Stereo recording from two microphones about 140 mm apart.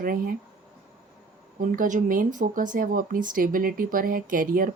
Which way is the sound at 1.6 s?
70° right (ahead or behind).